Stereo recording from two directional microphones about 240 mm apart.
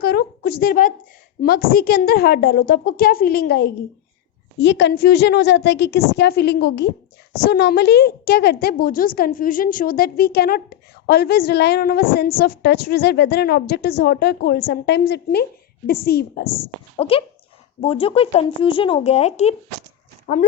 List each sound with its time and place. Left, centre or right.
0.0 s a woman's voice: left
17.0 s speech: left